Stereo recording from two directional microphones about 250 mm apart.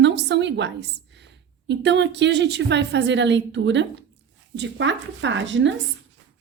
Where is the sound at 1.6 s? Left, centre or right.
Right.